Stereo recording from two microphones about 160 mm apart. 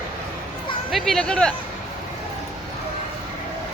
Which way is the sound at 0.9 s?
Centre (ahead or behind).